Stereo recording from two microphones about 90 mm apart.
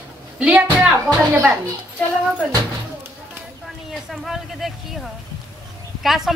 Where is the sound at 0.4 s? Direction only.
15° right (ahead or behind).